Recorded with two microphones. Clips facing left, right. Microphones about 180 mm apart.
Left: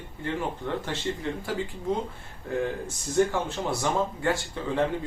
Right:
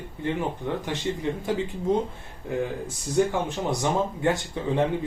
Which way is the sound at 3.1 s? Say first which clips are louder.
Right 1 dB; 15° right (ahead or behind).